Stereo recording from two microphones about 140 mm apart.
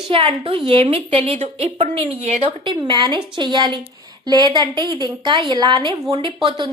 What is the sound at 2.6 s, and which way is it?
Speech, 35° right (ahead or behind).